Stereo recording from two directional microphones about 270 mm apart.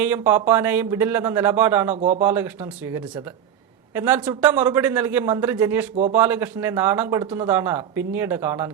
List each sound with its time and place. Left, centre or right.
0.0 s speech: centre
2.0 s speech: right
2.2 s speech: centre